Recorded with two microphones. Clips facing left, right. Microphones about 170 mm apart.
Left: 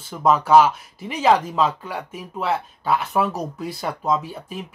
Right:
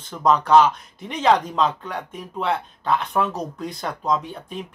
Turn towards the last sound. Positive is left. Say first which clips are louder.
# left 1 dB
turn(degrees=5)  # may be behind; listen again after turning